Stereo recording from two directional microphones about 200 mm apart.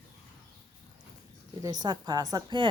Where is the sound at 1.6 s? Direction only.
20° right (ahead or behind).